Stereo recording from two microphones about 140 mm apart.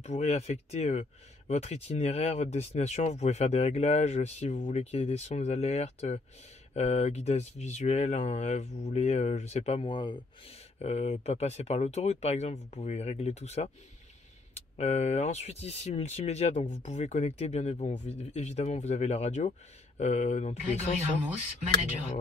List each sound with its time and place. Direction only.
0.0 s speech: 50° left (ahead or behind)
10.8 s speech: 50° left (ahead or behind)